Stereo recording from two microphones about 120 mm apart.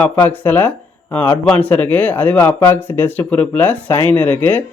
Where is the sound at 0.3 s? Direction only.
15° left (ahead or behind).